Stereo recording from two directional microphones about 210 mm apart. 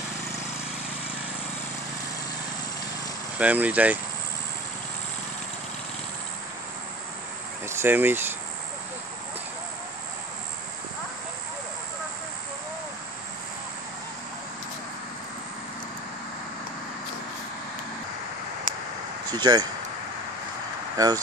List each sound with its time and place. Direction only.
3.3 s speech: 5° right (ahead or behind)
7.6 s speech: 10° right (ahead or behind)
19.3 s speech: 20° right (ahead or behind)
21.0 s speech: 15° right (ahead or behind)